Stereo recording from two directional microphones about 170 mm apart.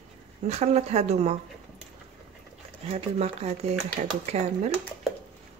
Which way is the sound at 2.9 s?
40° right (ahead or behind).